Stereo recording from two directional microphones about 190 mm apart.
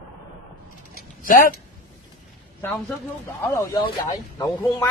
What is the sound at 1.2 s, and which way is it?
Speech, 45° left (ahead or behind).